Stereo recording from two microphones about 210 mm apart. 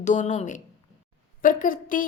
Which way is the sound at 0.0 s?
35° left (ahead or behind).